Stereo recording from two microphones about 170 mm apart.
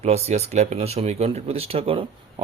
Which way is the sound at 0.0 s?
40° right (ahead or behind).